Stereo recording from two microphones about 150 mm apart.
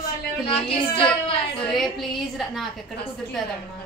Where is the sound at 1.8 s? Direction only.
Centre (ahead or behind).